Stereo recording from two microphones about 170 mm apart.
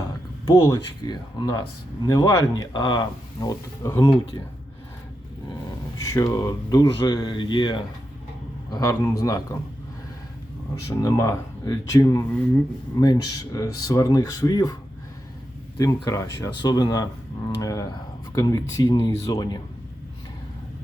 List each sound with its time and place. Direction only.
0.4 s speech: 20° left (ahead or behind)
6.0 s speech: 20° left (ahead or behind)
10.8 s speech: 20° left (ahead or behind)
15.8 s speech: 20° left (ahead or behind)